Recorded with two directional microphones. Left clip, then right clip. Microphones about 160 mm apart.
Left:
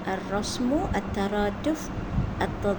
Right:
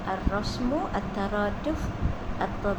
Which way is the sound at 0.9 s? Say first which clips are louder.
Left 1 dB; 50° left (ahead or behind).